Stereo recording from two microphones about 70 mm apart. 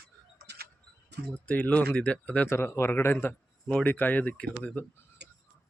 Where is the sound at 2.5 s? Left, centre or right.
Left.